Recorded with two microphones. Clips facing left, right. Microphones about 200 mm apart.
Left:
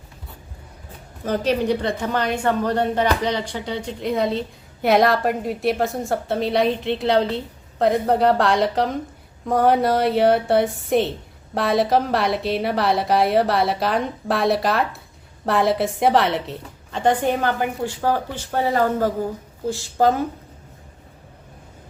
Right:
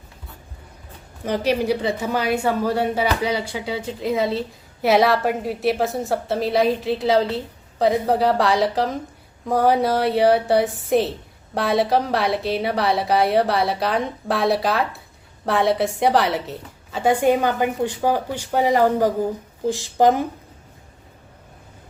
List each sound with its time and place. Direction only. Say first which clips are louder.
1.2 s a woman's voice: even; 10° right (ahead or behind)